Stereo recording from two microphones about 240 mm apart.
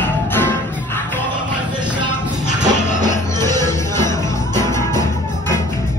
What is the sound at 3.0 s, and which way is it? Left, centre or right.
Music, centre.